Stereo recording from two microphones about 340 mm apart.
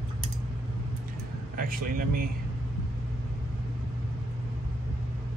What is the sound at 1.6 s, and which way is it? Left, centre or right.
Speech, right.